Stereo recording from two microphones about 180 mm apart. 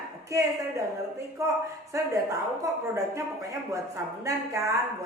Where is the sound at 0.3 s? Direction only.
15° right (ahead or behind).